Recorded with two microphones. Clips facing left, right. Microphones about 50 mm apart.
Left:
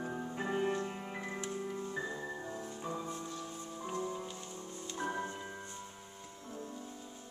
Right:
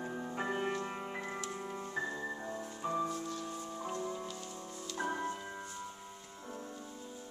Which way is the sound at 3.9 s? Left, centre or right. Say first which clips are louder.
Left 1 dB; centre.